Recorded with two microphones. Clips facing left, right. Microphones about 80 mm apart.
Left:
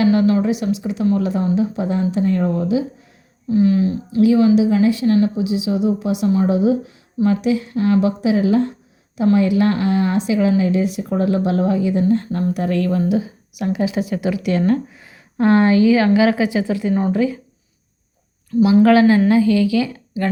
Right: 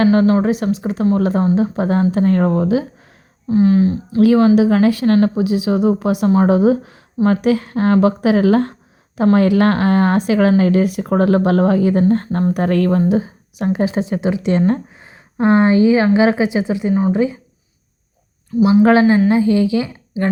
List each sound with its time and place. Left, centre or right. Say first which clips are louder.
0.0 s a woman's voice: right 2 dB; right
3.5 s speech: right 2 dB; right
4.2 s a woman's voice: right 2 dB; right
13.0 s speech: right 3 dB; right
14.0 s a woman's voice: right 2 dB; right
18.6 s a woman's voice: right 1 dB; right